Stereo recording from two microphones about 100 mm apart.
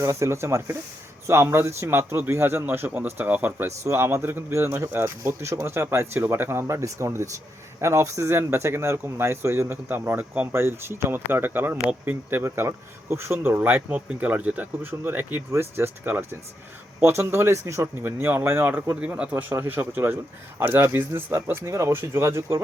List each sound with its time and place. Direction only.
0.0 s speech: 25° right (ahead or behind)